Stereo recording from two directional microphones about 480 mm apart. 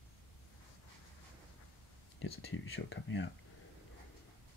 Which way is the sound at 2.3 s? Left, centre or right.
Left.